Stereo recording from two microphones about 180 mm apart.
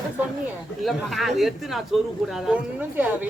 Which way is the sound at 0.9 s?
Centre (ahead or behind).